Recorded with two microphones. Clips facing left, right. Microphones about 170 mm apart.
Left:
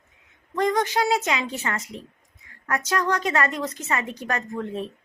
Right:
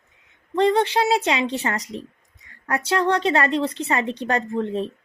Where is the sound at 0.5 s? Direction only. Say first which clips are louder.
Right 4 dB; 30° right (ahead or behind).